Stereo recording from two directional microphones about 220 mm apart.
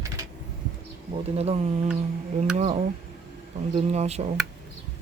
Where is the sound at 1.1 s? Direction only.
25° right (ahead or behind).